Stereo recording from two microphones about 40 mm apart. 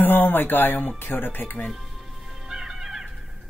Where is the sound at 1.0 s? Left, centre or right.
Left.